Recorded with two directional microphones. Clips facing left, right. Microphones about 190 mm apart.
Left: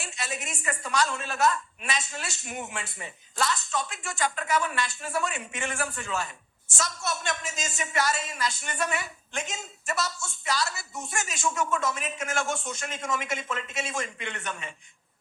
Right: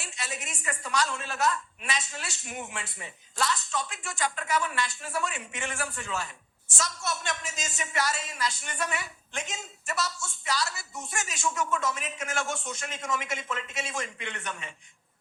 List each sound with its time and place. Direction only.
0.0 s a woman's voice: 50° left (ahead or behind)